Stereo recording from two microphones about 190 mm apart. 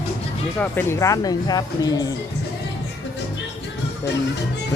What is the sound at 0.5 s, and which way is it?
Speech, 10° left (ahead or behind).